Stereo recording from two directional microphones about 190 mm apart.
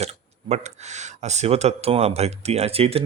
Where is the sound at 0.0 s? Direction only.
35° right (ahead or behind).